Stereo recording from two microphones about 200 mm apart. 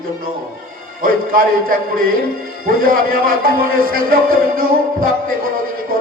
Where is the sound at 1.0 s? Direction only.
45° right (ahead or behind).